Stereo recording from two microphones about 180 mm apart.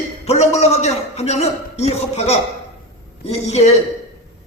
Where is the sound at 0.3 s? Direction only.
35° left (ahead or behind).